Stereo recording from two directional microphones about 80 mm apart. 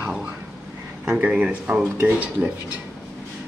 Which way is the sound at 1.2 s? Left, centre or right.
Centre.